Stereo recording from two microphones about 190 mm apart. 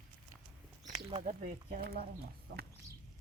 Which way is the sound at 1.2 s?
40° right (ahead or behind).